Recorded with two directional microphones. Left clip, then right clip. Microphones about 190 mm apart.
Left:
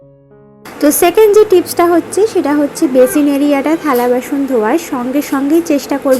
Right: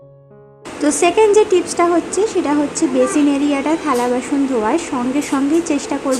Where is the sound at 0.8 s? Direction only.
15° left (ahead or behind).